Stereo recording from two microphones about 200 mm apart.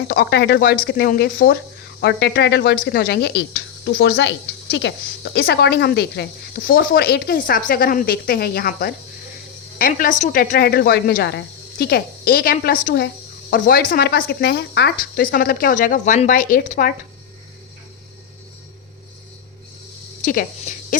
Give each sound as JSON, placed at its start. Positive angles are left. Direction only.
{"t": 0.1, "sound": "speech", "side_deg": 50}
{"t": 20.2, "sound": "speech", "side_deg": 40}